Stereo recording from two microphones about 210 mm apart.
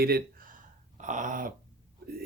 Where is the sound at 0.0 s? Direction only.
45° right (ahead or behind).